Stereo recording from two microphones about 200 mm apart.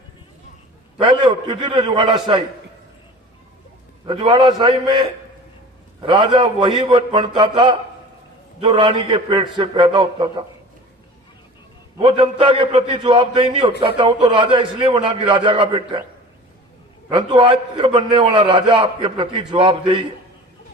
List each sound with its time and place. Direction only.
0.9 s a man's voice: 25° right (ahead or behind)
4.0 s a man's voice: 20° right (ahead or behind)
11.9 s a man's voice: 25° right (ahead or behind)
17.1 s a man's voice: 25° right (ahead or behind)